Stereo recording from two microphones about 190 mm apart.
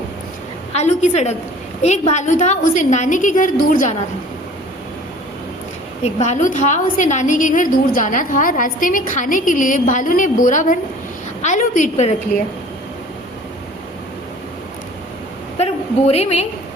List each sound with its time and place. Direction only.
0.8 s a woman's voice: 35° left (ahead or behind)
6.1 s a woman's voice: 40° left (ahead or behind)
15.5 s a sound: 35° left (ahead or behind)